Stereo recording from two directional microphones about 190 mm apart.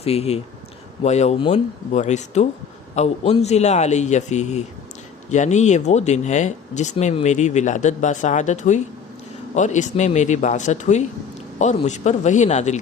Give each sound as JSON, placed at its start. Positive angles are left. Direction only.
{"t": 0.0, "sound": "speech", "side_deg": 30}